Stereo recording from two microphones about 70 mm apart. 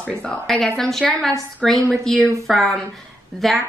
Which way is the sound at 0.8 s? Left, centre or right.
Centre.